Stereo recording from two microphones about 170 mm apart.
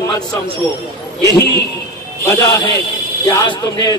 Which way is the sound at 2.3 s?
15° left (ahead or behind).